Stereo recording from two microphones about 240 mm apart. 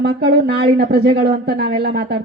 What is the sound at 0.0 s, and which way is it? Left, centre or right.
A woman's voice, right.